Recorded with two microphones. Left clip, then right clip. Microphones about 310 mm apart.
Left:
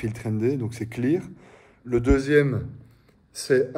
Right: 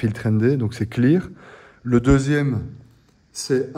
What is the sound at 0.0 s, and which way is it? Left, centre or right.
Speech, right.